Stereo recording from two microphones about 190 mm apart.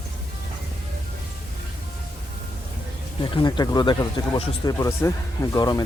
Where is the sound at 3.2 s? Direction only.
25° left (ahead or behind).